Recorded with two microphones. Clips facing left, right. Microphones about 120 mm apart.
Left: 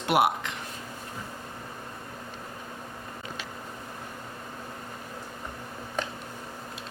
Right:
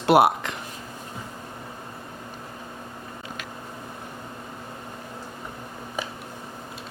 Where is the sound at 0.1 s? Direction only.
35° right (ahead or behind).